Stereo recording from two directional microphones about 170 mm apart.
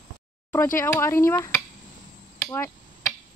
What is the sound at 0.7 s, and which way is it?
Speech, 15° left (ahead or behind).